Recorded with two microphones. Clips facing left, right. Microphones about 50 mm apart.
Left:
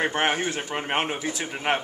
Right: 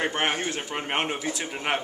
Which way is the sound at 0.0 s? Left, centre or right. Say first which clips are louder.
Left 2 dB; centre.